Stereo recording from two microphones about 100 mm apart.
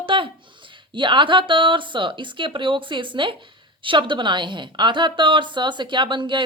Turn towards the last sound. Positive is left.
turn(degrees=-55)  # may be behind; listen again after turning